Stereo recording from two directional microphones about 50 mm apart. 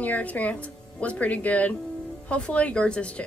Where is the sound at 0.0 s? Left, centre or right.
Left.